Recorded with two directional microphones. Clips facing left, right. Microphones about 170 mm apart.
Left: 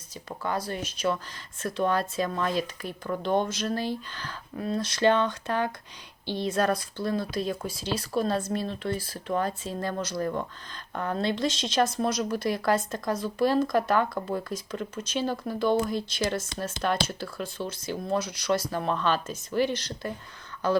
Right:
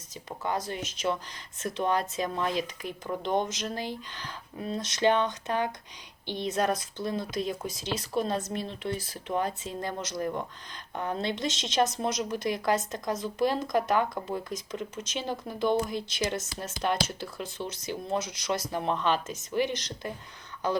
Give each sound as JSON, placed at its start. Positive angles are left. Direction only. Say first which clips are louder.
{"t": 0.3, "sound": "speech", "louder": "left 1 dB", "side_deg": -20}